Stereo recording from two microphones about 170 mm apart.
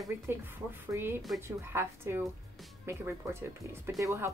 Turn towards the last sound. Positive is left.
turn(degrees=-20)  # may be behind; listen again after turning